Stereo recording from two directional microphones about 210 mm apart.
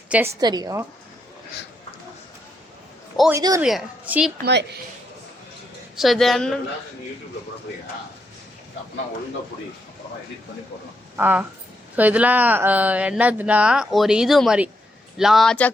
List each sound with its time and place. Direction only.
0.1 s speech: 10° right (ahead or behind)
3.3 s speech: 15° right (ahead or behind)
3.6 s a woman's voice: 5° right (ahead or behind)
4.4 s a woman's voice: 55° right (ahead or behind)
6.0 s a woman's voice: centre (ahead or behind)
11.2 s a woman's voice: 10° right (ahead or behind)